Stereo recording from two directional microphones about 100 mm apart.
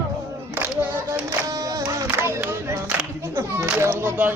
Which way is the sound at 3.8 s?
25° right (ahead or behind).